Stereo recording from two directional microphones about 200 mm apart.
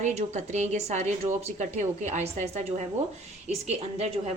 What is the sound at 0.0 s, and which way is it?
Speech, 35° right (ahead or behind).